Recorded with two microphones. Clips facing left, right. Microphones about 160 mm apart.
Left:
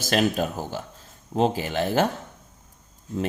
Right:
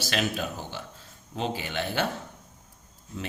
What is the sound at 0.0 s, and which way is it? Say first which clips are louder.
Speech: left 6 dB; 40° left (ahead or behind).